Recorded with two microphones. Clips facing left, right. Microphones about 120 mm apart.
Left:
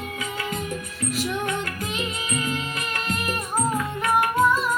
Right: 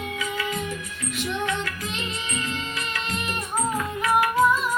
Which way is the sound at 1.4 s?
50° left (ahead or behind).